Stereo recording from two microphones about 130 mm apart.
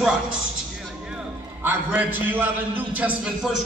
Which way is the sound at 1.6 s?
15° right (ahead or behind).